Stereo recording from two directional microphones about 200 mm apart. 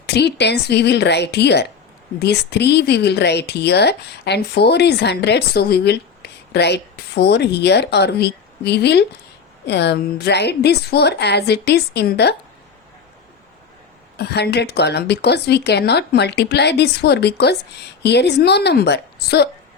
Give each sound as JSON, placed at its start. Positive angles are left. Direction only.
{"t": 0.0, "sound": "speech", "side_deg": 55}
{"t": 14.2, "sound": "speech", "side_deg": 55}